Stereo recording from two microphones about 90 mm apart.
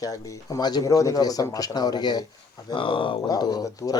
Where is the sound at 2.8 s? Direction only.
70° left (ahead or behind).